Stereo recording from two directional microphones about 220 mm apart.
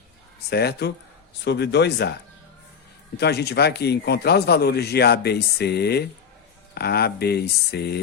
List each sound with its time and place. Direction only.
0.5 s speech: 45° left (ahead or behind)
3.2 s speech: 50° left (ahead or behind)